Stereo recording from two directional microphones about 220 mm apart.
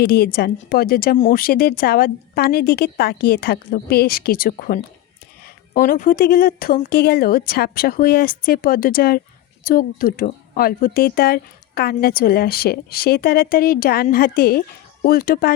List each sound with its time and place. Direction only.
0.0 s speech: 45° left (ahead or behind)